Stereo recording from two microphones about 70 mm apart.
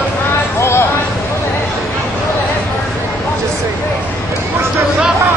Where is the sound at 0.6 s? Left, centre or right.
Left.